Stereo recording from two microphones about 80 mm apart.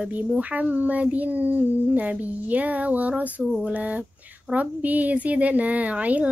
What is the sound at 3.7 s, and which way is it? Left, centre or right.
A child's voice, centre.